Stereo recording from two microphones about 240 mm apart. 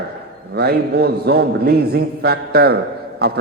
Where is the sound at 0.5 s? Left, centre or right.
Right.